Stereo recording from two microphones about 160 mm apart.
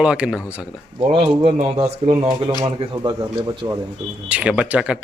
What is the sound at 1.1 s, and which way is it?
Speech, 40° right (ahead or behind).